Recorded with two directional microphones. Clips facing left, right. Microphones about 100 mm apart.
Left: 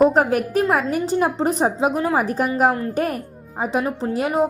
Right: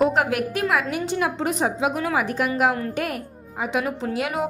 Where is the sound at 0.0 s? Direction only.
35° left (ahead or behind).